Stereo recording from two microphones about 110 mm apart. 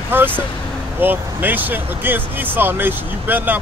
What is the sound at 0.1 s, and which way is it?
Speech, 20° right (ahead or behind).